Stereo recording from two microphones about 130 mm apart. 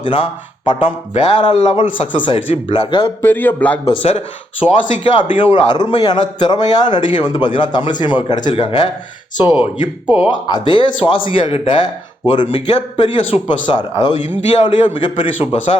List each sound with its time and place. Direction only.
0.0 s a man's voice: 40° left (ahead or behind)
3.2 s a man's voice: 15° left (ahead or behind)
3.8 s speech: 50° left (ahead or behind)
4.6 s a man's voice: 40° left (ahead or behind)
10.1 s speech: 5° right (ahead or behind)
10.4 s a man's voice: 35° left (ahead or behind)